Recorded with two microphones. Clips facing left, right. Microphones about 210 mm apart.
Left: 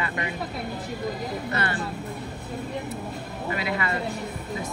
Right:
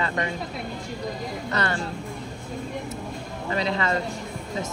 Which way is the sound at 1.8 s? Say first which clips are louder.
Even; 5° left (ahead or behind).